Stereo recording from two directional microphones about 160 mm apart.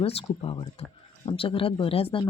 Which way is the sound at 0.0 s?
40° left (ahead or behind).